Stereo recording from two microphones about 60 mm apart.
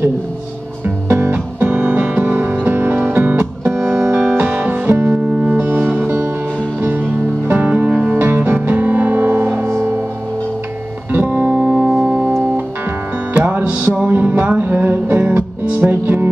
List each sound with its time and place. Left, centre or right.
0.8 s music: right
11.1 s music: right